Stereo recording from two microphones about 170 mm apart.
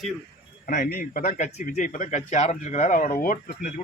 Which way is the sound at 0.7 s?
60° left (ahead or behind).